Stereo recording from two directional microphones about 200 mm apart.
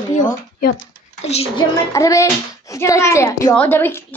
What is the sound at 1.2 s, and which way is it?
Speech, 30° left (ahead or behind).